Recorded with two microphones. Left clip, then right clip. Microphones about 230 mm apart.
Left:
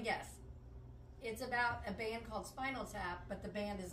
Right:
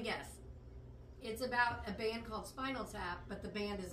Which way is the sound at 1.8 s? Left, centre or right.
Left.